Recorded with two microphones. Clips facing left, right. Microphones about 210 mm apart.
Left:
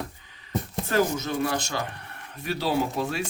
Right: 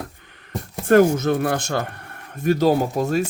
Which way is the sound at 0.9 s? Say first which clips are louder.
Right 11 dB; 55° right (ahead or behind).